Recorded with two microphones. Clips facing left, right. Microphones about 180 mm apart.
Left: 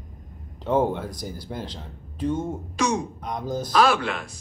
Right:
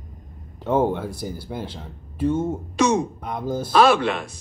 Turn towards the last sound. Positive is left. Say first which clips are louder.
# right 5 dB
turn(degrees=-25)  # may be behind; listen again after turning